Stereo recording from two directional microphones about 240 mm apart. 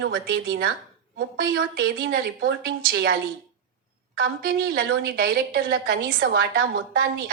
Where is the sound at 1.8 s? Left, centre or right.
Right.